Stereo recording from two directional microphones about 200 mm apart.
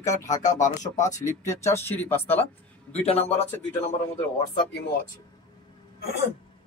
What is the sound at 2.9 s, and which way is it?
Speech, 30° left (ahead or behind).